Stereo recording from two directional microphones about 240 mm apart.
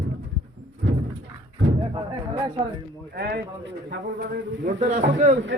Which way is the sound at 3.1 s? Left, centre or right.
Right.